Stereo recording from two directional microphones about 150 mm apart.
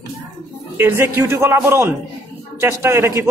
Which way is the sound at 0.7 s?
15° right (ahead or behind).